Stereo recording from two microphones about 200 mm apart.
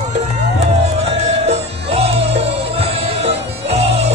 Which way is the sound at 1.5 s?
30° right (ahead or behind).